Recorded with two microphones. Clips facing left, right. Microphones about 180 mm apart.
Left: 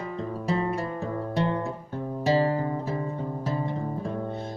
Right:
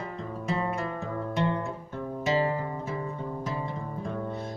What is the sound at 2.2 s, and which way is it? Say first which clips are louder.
Music: left 3 dB; 35° left (ahead or behind).